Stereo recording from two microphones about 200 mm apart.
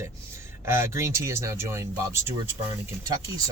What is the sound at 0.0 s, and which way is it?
Speech, 15° right (ahead or behind).